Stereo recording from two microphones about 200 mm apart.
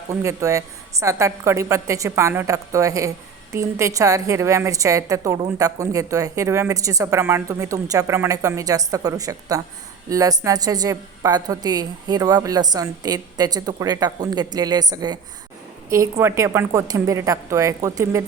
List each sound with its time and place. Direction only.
0.1 s a woman's voice: 15° right (ahead or behind)